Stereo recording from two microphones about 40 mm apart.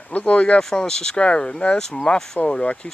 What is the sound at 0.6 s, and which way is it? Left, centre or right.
Speech, centre.